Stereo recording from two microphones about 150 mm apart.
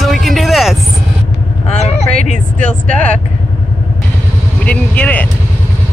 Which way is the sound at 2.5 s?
60° right (ahead or behind).